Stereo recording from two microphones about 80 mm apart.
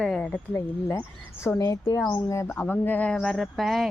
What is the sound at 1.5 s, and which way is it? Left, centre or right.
A woman's voice, left.